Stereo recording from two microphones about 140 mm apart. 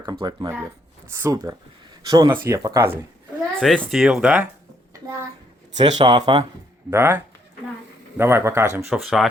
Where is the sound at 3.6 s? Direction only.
Centre (ahead or behind).